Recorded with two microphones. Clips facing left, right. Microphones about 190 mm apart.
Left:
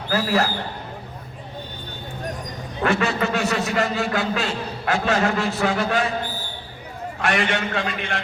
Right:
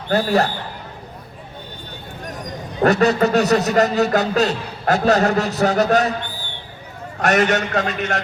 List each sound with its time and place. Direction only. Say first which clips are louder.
0.1 s speech: right 4 dB; 35° right (ahead or behind)
2.8 s speech: right 6 dB; 40° right (ahead or behind)
7.2 s a man's voice: right 6 dB; 40° right (ahead or behind)